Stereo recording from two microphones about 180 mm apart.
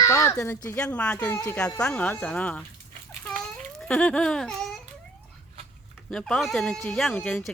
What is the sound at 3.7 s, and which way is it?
Speech, 5° left (ahead or behind).